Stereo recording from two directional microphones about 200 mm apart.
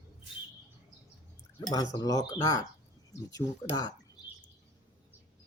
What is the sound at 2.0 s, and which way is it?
Speech, 20° left (ahead or behind).